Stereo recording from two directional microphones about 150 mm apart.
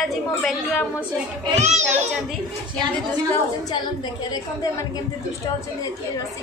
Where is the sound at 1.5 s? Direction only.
50° right (ahead or behind).